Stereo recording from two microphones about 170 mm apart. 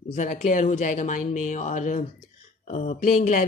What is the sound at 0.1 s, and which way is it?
Speech, 50° left (ahead or behind).